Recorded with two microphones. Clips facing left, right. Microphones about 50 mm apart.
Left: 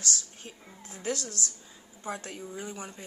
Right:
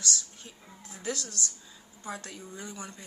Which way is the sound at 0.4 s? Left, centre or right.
Left.